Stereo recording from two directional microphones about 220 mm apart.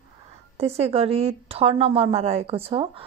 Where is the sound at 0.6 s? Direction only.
30° right (ahead or behind).